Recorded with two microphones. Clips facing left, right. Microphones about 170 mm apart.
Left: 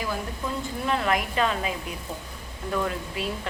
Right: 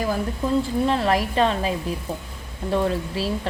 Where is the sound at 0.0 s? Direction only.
40° right (ahead or behind).